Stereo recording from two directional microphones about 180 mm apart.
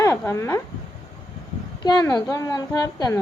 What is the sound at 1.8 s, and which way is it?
A woman's voice, 20° left (ahead or behind).